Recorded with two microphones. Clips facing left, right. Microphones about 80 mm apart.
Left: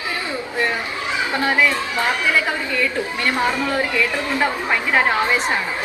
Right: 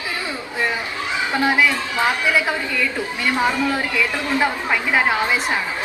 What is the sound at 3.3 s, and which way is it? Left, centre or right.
Speech, centre.